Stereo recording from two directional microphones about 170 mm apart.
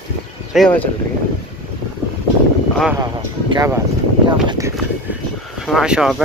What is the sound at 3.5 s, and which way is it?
Speech, 15° right (ahead or behind).